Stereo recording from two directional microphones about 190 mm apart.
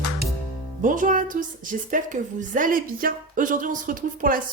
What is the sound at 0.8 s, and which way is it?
A woman's voice, 45° right (ahead or behind).